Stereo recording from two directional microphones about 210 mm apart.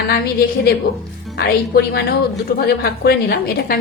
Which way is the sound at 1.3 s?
50° left (ahead or behind).